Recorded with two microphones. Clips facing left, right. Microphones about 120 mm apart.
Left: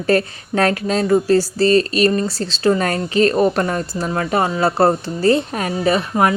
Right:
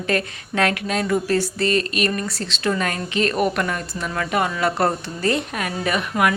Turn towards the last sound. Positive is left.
turn(degrees=30)  # may be behind; listen again after turning